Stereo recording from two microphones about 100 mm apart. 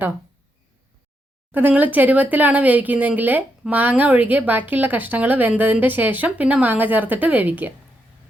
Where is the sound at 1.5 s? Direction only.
20° right (ahead or behind).